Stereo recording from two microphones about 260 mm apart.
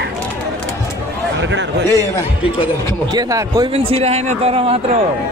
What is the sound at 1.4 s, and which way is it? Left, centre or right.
Speech, right.